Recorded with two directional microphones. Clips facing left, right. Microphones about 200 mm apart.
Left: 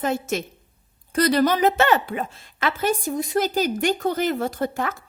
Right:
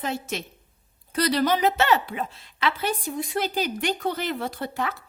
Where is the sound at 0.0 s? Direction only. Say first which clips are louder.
Left 6 dB; 50° left (ahead or behind).